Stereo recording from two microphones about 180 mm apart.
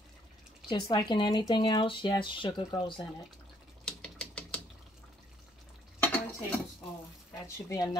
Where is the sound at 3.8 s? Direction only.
5° left (ahead or behind).